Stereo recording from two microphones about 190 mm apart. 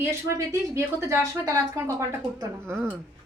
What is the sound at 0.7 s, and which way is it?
Speech, 15° right (ahead or behind).